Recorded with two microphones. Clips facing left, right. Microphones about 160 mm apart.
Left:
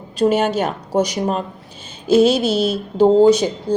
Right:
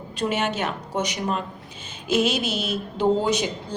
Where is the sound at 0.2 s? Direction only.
40° left (ahead or behind).